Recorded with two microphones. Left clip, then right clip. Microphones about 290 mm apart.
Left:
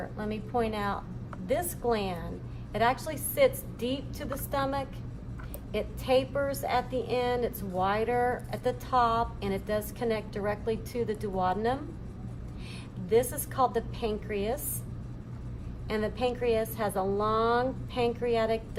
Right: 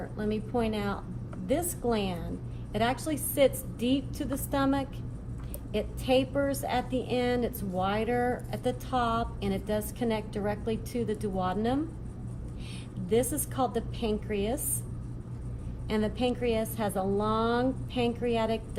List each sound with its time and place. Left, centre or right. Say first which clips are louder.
0.2 s a woman's voice: even; left
6.3 s a woman's voice: even; left
13.1 s a woman's voice: left 2 dB; left
15.9 s a woman's voice: even; left